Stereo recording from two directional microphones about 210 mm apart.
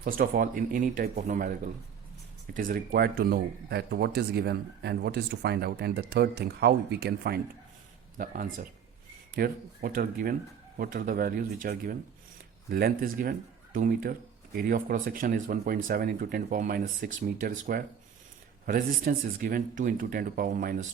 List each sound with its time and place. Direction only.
0.0 s speech: 40° right (ahead or behind)
8.2 s speech: 40° right (ahead or behind)